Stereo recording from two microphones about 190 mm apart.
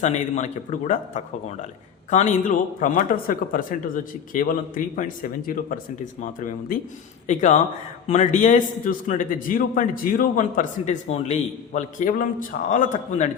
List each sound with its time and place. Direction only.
0.0 s a man's voice: 40° left (ahead or behind)
7.3 s a man's voice: 40° left (ahead or behind)